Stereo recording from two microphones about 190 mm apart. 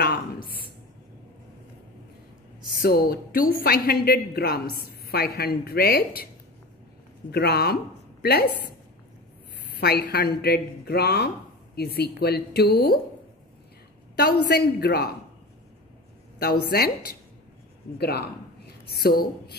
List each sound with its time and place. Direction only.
2.8 s a woman's voice: 50° left (ahead or behind)
7.2 s a woman's voice: 55° left (ahead or behind)
9.8 s a woman's voice: 55° left (ahead or behind)
14.1 s a woman's voice: 55° left (ahead or behind)
16.3 s a woman's voice: 55° left (ahead or behind)
17.9 s a woman's voice: 55° left (ahead or behind)